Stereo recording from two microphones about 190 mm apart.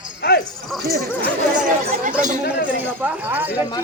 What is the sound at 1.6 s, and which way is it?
Speech, 45° right (ahead or behind).